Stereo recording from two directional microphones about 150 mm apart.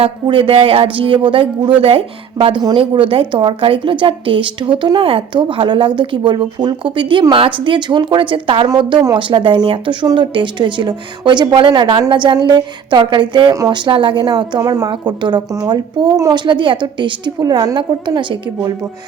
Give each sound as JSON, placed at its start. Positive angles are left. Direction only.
{"t": 0.0, "sound": "speech", "side_deg": -35}